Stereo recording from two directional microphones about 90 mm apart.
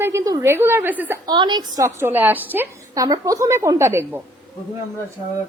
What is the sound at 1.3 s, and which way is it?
Speech, 55° right (ahead or behind).